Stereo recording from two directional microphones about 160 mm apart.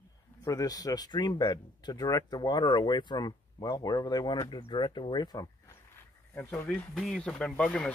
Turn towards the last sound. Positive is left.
turn(degrees=5)  # may be behind; listen again after turning